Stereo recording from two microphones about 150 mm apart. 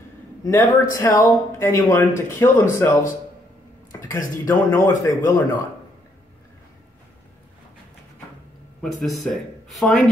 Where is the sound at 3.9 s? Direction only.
20° left (ahead or behind).